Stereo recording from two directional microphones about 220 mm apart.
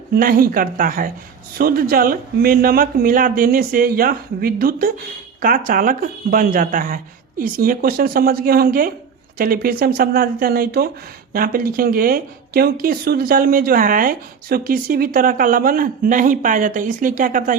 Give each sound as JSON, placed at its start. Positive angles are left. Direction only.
{"t": 0.1, "sound": "speech", "side_deg": -40}